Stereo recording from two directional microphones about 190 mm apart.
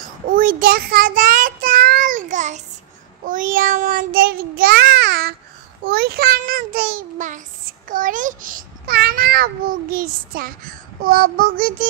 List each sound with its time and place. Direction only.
0.3 s child singing: 45° right (ahead or behind)
3.3 s a child's voice: 45° right (ahead or behind)